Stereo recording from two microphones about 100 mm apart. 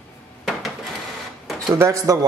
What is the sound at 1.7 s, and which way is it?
Speech, 30° right (ahead or behind).